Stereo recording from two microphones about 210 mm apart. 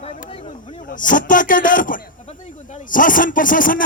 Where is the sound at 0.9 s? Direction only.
40° left (ahead or behind).